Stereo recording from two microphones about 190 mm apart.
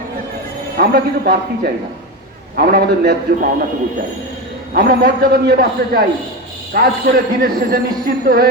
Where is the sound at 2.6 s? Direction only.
50° right (ahead or behind).